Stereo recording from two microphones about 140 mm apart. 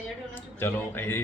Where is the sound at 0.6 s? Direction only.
15° left (ahead or behind).